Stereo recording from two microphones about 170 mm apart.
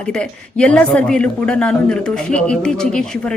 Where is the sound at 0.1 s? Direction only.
5° left (ahead or behind).